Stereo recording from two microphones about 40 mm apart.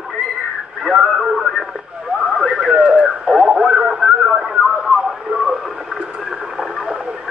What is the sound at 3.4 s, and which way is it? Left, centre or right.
Radio, centre.